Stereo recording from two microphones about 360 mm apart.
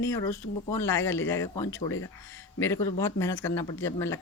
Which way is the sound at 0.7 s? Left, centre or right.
Centre.